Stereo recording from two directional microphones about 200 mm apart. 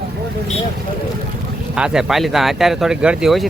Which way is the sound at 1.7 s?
5° right (ahead or behind).